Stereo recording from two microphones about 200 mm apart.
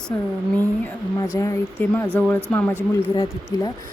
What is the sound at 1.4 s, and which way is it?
Speech, 15° left (ahead or behind).